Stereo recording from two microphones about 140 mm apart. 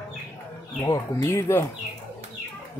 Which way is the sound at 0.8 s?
20° left (ahead or behind).